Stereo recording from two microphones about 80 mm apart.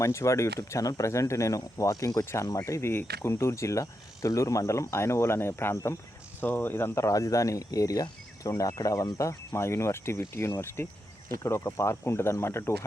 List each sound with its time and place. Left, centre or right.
0.0 s speech: left
6.4 s speech: left